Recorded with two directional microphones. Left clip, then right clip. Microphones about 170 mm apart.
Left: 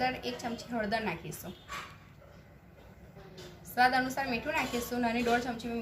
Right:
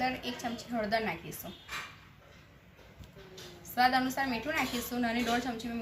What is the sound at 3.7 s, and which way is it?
A woman's voice, 30° left (ahead or behind).